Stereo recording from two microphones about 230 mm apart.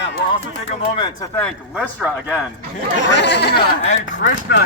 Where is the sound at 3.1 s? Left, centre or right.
Left.